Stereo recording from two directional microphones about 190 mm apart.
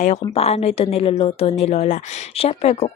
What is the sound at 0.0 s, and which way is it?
A woman's voice, 35° left (ahead or behind).